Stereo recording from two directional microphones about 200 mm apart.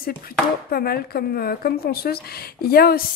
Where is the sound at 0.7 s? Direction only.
50° left (ahead or behind).